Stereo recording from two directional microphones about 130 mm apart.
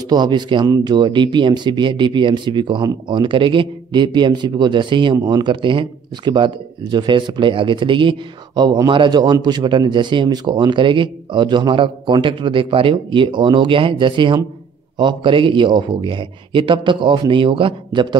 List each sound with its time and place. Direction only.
0.1 s speech: 35° right (ahead or behind)